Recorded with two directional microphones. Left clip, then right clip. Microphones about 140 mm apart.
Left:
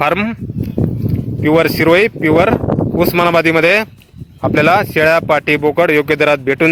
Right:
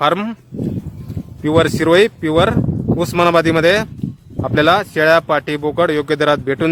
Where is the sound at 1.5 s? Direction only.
15° left (ahead or behind).